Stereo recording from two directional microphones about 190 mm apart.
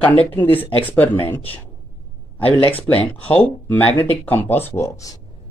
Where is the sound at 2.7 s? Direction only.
10° left (ahead or behind).